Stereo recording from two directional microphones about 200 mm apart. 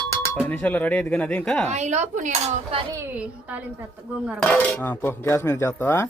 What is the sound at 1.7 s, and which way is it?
Speech, 35° right (ahead or behind).